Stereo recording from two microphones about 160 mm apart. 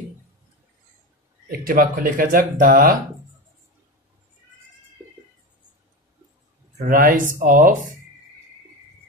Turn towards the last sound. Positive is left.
turn(degrees=-60)  # may be behind; listen again after turning